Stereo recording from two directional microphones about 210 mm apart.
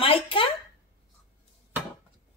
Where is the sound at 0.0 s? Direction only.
25° left (ahead or behind).